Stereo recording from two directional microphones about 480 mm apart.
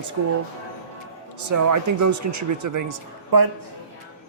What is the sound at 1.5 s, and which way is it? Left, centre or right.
A man's voice, right.